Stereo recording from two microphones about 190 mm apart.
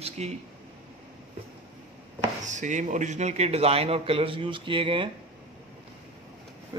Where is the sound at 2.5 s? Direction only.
40° right (ahead or behind).